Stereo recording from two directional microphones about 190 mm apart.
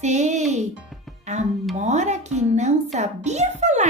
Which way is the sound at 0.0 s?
35° right (ahead or behind).